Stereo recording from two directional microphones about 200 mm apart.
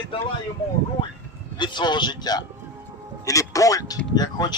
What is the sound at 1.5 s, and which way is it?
A man's voice, 20° left (ahead or behind).